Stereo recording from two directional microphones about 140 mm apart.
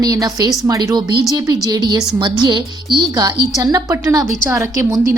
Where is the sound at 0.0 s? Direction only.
25° right (ahead or behind).